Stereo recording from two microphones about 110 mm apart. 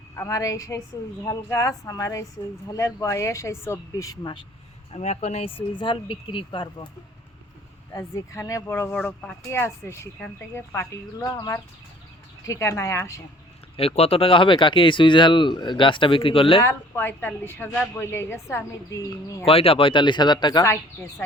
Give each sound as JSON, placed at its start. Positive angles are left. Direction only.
{"t": 0.2, "sound": "a woman's voice", "side_deg": 30}
{"t": 4.9, "sound": "speech", "side_deg": 90}
{"t": 7.9, "sound": "speech", "side_deg": 30}
{"t": 13.7, "sound": "speech", "side_deg": 65}
{"t": 16.6, "sound": "speech", "side_deg": 20}
{"t": 19.5, "sound": "speech", "side_deg": 60}
{"t": 20.7, "sound": "speech", "side_deg": 20}